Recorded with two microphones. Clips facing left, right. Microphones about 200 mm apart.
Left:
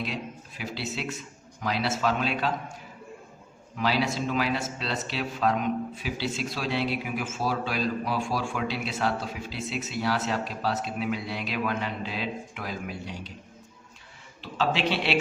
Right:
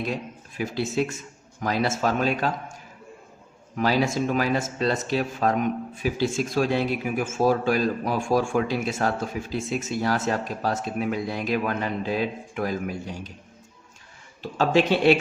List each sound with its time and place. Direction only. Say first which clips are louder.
0.0 s speech: right 4 dB; 45° right (ahead or behind)
3.8 s speech: right 4 dB; 45° right (ahead or behind)
14.4 s speech: right 6 dB; 45° right (ahead or behind)